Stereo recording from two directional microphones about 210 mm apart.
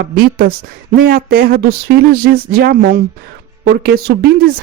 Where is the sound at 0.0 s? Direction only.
45° right (ahead or behind).